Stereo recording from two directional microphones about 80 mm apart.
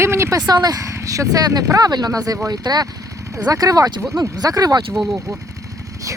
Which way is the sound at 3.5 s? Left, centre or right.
Right.